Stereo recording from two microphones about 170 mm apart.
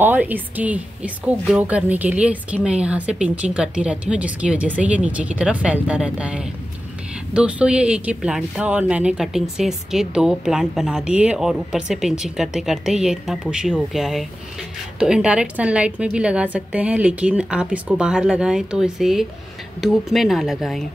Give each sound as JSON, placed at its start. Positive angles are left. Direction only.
{"t": 0.0, "sound": "speech", "side_deg": -10}